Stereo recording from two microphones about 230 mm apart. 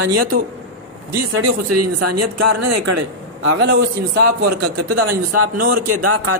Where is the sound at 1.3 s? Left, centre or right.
Right.